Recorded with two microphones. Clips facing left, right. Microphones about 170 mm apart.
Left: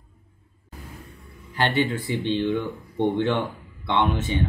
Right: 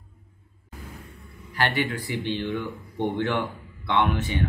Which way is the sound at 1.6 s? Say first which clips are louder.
Left 3 dB; 25° left (ahead or behind).